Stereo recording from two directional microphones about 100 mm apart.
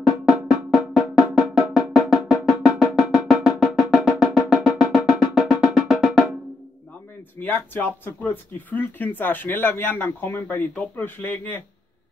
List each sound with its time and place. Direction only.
0.0 s music: 5° right (ahead or behind)
7.3 s speech: 20° left (ahead or behind)